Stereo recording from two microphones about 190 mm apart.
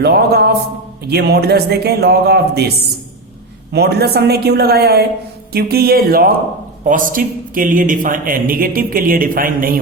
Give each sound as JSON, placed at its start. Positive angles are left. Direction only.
{"t": 0.0, "sound": "a man's voice", "side_deg": -55}